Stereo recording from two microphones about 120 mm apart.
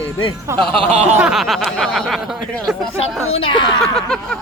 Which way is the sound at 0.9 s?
60° right (ahead or behind).